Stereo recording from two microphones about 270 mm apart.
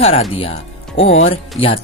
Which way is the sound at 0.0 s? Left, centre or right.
Left.